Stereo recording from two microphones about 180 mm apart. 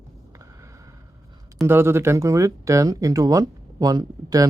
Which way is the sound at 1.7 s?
15° right (ahead or behind).